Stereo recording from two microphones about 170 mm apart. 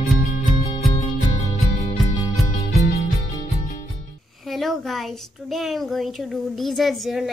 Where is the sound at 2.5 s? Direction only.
40° left (ahead or behind).